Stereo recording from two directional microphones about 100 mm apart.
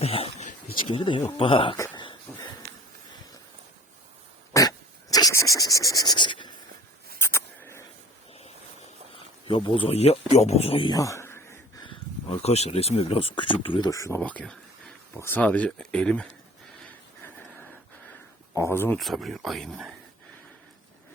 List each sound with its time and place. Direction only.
0.0 s speech: 70° left (ahead or behind)
0.9 s speech: 55° left (ahead or behind)
2.3 s a sound: 15° left (ahead or behind)
4.5 s dog: 30° left (ahead or behind)
5.3 s scratch: 30° left (ahead or behind); by 6.5 s 50° left (ahead or behind)
7.2 s a sound: 25° left (ahead or behind)
9.5 s speech: 60° left (ahead or behind); by 10.8 s 85° left
10.8 s a sound: 35° left (ahead or behind)
11.8 s speech: 60° left (ahead or behind)
13.9 s speech: 35° left (ahead or behind)
14.2 s speech: 10° left (ahead or behind)
18.5 s speech: 25° left (ahead or behind)
18.9 s speech: centre (ahead or behind)